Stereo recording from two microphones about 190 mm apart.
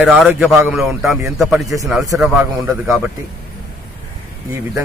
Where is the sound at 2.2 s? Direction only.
5° right (ahead or behind).